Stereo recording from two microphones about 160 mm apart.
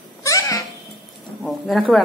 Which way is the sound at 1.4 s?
Centre (ahead or behind).